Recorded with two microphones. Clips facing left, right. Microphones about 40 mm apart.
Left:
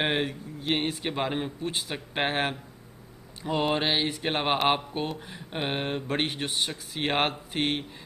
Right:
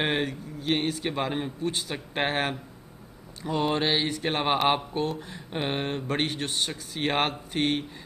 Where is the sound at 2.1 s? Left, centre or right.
Centre.